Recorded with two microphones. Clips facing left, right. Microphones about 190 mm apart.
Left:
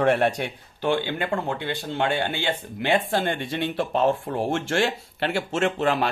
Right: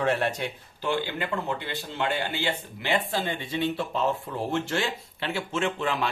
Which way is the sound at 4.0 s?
50° left (ahead or behind).